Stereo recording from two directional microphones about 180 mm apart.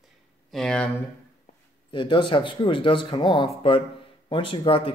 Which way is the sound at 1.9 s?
25° left (ahead or behind).